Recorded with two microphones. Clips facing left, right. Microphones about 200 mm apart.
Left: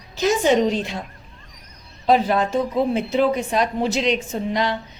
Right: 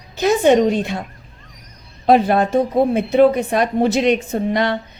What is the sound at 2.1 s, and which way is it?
A woman's voice, 60° right (ahead or behind).